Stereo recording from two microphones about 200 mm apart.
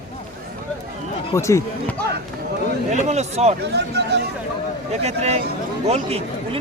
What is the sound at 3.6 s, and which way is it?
Speech, 55° right (ahead or behind).